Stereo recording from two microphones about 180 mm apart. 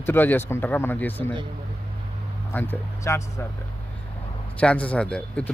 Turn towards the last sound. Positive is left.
turn(degrees=5)  # may be behind; listen again after turning